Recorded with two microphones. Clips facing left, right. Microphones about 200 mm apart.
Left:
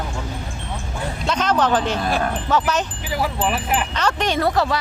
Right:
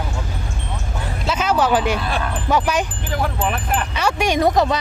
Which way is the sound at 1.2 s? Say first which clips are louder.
Right 1 dB; 5° right (ahead or behind).